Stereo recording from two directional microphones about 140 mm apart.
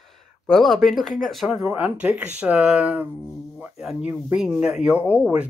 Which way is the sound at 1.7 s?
10° right (ahead or behind).